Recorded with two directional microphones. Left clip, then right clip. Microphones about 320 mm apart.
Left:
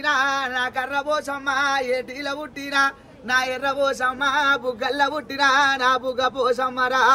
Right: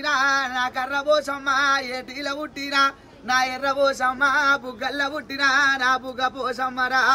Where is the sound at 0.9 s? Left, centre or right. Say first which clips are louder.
Right 6 dB; centre.